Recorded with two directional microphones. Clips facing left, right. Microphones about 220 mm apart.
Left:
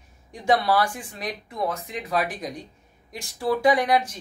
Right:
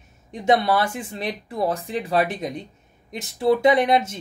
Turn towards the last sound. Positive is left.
turn(degrees=-25)  # may be behind; listen again after turning